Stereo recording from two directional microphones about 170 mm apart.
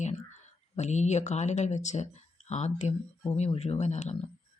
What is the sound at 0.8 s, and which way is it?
Speech, 40° left (ahead or behind).